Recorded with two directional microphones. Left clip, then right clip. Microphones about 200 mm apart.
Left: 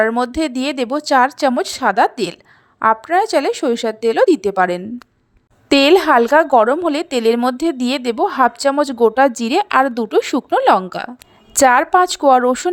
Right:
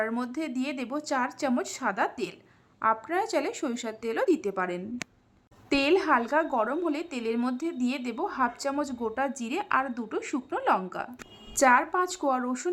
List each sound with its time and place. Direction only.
0.0 s a woman's voice: 35° left (ahead or behind)